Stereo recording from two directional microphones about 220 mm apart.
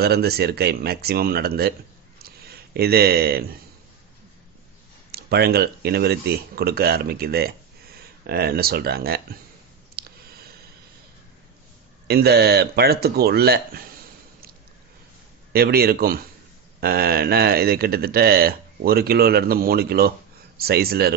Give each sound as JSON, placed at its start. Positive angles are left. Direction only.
{"t": 0.0, "sound": "speech", "side_deg": -45}
{"t": 2.2, "sound": "a sound", "side_deg": -45}
{"t": 5.1, "sound": "speech", "side_deg": -45}
{"t": 9.9, "sound": "a sound", "side_deg": -45}
{"t": 12.1, "sound": "speech", "side_deg": -45}
{"t": 15.5, "sound": "speech", "side_deg": -45}